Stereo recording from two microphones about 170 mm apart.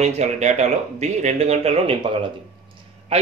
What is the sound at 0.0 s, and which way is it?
Speech, 45° right (ahead or behind).